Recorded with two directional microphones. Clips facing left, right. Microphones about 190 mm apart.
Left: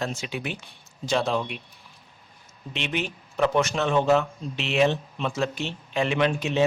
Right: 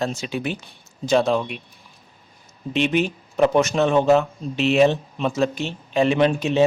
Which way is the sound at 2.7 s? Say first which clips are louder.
Right 9 dB; 45° right (ahead or behind).